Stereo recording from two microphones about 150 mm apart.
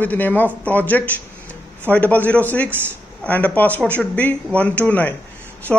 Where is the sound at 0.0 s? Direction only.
10° left (ahead or behind).